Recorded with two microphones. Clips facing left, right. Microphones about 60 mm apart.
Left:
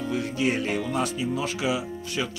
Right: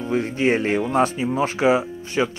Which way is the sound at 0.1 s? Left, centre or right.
Right.